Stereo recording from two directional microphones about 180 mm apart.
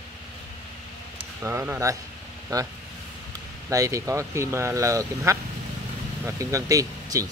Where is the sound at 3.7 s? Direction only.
20° right (ahead or behind).